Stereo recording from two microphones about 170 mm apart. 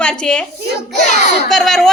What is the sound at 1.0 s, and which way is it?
Speech, 45° left (ahead or behind).